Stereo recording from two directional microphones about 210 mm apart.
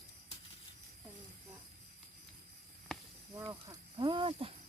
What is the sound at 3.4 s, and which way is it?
Snake, 15° right (ahead or behind).